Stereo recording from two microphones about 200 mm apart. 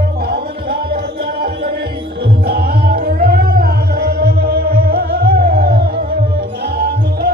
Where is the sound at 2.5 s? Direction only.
50° right (ahead or behind).